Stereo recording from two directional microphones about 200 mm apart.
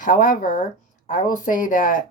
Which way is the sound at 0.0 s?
45° left (ahead or behind).